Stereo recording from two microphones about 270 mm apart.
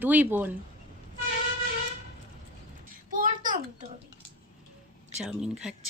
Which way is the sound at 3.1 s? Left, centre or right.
Right.